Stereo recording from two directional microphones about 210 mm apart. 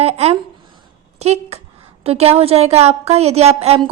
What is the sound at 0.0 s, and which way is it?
A woman's voice, 30° right (ahead or behind).